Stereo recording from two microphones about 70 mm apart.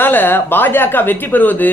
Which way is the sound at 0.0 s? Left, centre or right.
Left.